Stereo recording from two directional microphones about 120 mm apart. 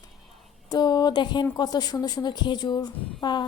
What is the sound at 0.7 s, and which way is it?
A woman's voice, 35° left (ahead or behind).